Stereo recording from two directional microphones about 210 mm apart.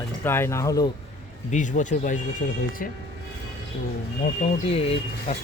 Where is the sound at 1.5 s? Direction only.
35° left (ahead or behind).